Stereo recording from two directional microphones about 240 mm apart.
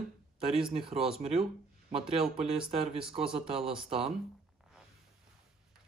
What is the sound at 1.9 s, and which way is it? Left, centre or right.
Speech, right.